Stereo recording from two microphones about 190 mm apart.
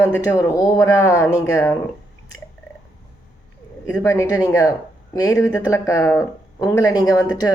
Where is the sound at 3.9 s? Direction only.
15° left (ahead or behind).